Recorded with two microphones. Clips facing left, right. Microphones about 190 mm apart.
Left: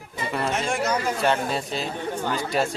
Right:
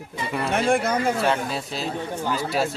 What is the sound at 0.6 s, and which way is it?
Speech, 55° right (ahead or behind).